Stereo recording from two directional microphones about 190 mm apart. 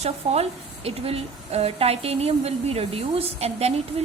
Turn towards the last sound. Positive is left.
turn(degrees=-35)  # may be behind; listen again after turning